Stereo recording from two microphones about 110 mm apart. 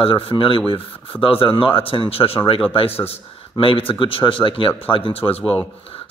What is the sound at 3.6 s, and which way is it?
Speech, 55° left (ahead or behind).